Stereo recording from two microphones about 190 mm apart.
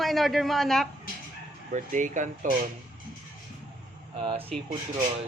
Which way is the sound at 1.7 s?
40° right (ahead or behind).